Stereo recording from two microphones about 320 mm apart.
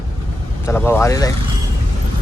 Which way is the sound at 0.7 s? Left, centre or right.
Centre.